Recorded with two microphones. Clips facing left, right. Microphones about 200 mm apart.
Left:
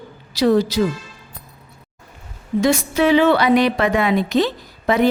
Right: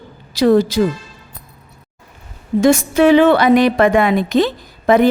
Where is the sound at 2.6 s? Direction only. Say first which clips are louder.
Right 5 dB; 45° right (ahead or behind).